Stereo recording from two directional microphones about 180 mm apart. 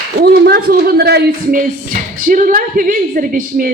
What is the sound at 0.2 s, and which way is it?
Speech, 60° right (ahead or behind).